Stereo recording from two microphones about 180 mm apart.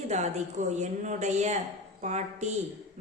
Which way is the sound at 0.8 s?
40° right (ahead or behind).